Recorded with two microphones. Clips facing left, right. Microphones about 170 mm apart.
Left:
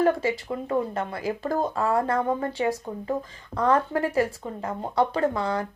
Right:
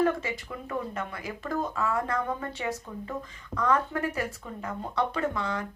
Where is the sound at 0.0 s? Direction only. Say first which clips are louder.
Left 4 dB; 30° left (ahead or behind).